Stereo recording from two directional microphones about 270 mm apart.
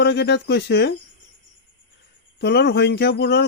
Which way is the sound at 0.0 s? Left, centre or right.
Left.